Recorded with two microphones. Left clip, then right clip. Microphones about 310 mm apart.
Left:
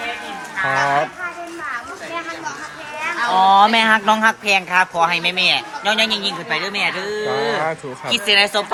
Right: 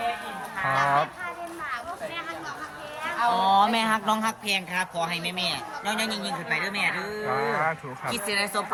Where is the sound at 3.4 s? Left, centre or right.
Left.